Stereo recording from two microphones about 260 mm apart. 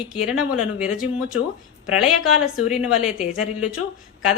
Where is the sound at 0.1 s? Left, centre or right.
Centre.